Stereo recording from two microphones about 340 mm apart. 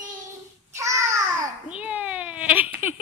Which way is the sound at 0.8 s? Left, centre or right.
Centre.